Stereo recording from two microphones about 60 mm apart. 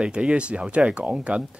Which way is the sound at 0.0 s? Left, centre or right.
Centre.